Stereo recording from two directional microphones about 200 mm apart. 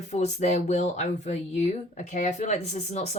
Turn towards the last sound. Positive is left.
turn(degrees=35)  # may be behind; listen again after turning